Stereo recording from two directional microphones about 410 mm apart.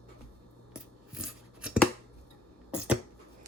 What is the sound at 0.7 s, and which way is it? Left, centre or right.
Scissors, centre.